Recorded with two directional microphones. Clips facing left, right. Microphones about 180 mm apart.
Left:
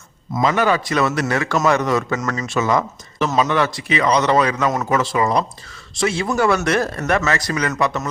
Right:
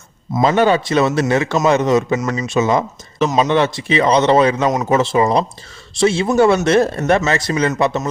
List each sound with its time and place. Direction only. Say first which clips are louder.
0.3 s a man's voice: right 4 dB; 30° right (ahead or behind)